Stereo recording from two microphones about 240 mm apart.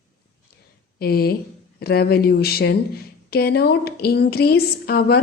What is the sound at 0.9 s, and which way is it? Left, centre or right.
Speech, left.